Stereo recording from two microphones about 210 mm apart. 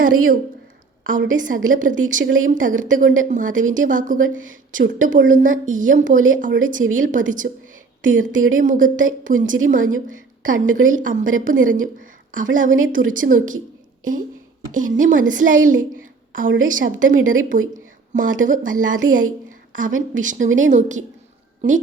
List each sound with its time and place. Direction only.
0.0 s a woman's voice: 40° right (ahead or behind)
14.7 s a woman's voice: 40° right (ahead or behind)